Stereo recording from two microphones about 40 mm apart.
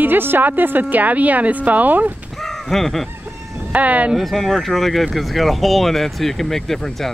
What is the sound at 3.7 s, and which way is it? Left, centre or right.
Speech, right.